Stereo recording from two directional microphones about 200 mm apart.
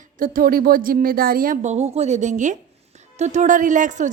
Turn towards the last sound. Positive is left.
turn(degrees=-40)  # may be behind; listen again after turning